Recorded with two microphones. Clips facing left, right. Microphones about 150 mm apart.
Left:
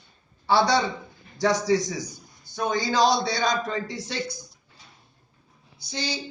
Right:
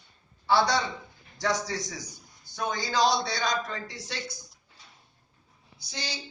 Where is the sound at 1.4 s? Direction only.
25° left (ahead or behind).